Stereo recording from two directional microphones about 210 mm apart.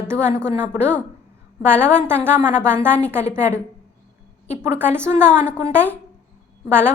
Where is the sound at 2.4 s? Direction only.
5° left (ahead or behind).